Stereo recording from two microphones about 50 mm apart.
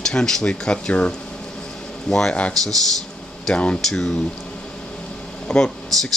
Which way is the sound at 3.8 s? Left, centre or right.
Centre.